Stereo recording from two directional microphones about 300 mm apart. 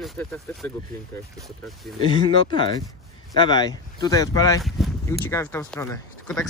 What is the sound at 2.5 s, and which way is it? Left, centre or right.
Speech, centre.